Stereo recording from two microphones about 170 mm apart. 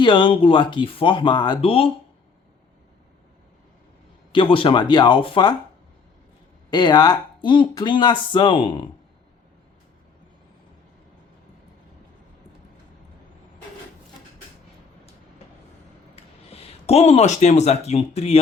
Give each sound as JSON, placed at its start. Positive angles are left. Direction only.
{"t": 0.0, "sound": "speech", "side_deg": 30}
{"t": 4.3, "sound": "speech", "side_deg": 30}
{"t": 6.7, "sound": "speech", "side_deg": 25}
{"t": 16.1, "sound": "speech", "side_deg": 35}